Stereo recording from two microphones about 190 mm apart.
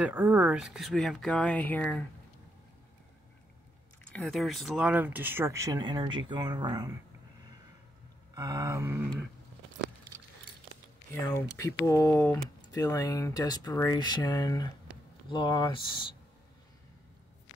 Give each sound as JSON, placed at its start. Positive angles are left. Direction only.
{"t": 0.0, "sound": "speech", "side_deg": -10}
{"t": 4.1, "sound": "speech", "side_deg": 5}
{"t": 8.4, "sound": "speech", "side_deg": -20}
{"t": 11.1, "sound": "speech", "side_deg": 10}